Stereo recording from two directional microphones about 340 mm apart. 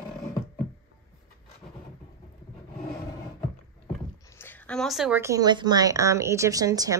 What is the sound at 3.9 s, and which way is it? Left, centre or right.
Speech, centre.